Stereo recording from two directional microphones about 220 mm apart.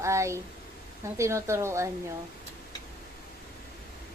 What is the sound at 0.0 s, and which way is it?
Speech, 15° right (ahead or behind).